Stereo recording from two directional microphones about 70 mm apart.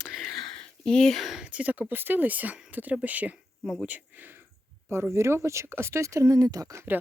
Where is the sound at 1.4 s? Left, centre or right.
Centre.